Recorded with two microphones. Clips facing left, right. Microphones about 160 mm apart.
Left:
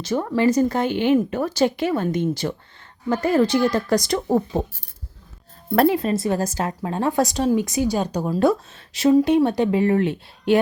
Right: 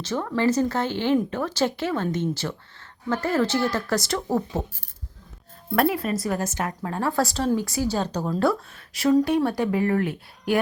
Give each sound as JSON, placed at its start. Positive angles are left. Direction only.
{"t": 0.0, "sound": "speech", "side_deg": 15}
{"t": 5.7, "sound": "speech", "side_deg": 30}
{"t": 6.8, "sound": "speech", "side_deg": 20}